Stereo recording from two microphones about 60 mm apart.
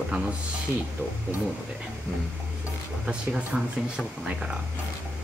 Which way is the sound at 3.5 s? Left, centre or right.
Centre.